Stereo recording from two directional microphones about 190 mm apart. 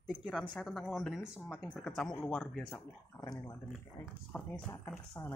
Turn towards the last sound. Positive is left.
turn(degrees=15)  # may be behind; listen again after turning